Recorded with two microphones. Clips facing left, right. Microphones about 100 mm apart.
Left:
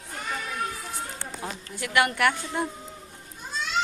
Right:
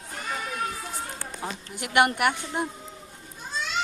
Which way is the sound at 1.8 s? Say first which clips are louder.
Right 1 dB; 20° right (ahead or behind).